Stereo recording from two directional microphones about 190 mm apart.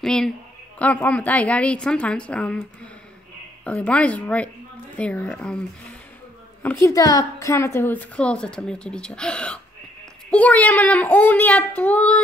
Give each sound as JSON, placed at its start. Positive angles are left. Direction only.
{"t": 0.0, "sound": "a woman's voice", "side_deg": 5}
{"t": 6.6, "sound": "a woman's voice", "side_deg": 10}